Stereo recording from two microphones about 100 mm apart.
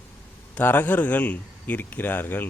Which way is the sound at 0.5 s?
20° left (ahead or behind).